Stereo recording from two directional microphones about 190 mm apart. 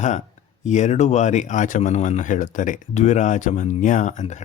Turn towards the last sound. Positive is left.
turn(degrees=40)  # may be behind; listen again after turning